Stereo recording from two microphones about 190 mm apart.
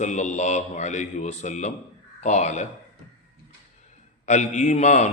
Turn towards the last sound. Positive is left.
turn(degrees=35)  # may be behind; listen again after turning